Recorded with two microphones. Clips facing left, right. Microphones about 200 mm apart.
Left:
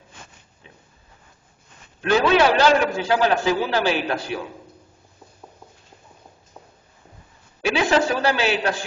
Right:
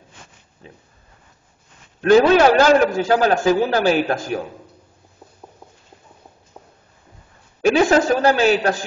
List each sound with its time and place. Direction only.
0.6 s speech: 35° right (ahead or behind)
2.0 s a man's voice: 45° right (ahead or behind)
7.6 s a man's voice: 45° right (ahead or behind)